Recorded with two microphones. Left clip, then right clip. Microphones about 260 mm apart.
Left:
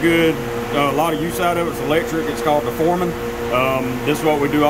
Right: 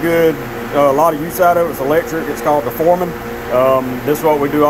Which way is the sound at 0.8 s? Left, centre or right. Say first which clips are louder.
Right 7 dB; centre.